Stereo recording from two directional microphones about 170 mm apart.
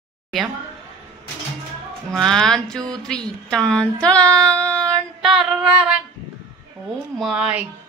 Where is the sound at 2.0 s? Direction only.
Centre (ahead or behind).